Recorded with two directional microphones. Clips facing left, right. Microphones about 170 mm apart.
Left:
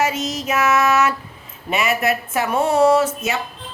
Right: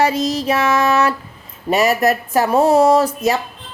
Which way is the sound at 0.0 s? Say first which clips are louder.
Right 5 dB; 35° right (ahead or behind).